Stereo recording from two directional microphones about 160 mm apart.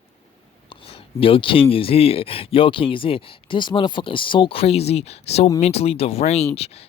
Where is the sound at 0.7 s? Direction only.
35° left (ahead or behind).